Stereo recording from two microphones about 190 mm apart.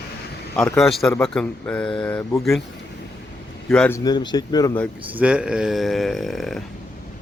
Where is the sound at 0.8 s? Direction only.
Centre (ahead or behind).